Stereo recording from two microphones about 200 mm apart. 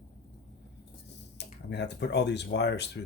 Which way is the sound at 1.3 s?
60° left (ahead or behind).